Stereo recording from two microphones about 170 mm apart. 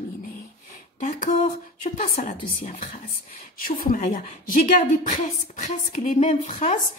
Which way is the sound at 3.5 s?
55° left (ahead or behind).